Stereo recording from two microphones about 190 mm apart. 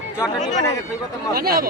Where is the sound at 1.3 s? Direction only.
50° right (ahead or behind).